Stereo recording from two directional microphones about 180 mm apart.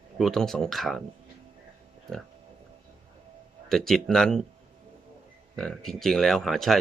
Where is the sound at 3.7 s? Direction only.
Centre (ahead or behind).